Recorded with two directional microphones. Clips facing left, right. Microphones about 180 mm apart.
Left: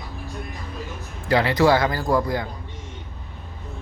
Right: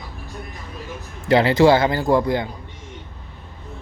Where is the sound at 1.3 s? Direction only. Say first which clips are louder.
Right 4 dB; 25° right (ahead or behind).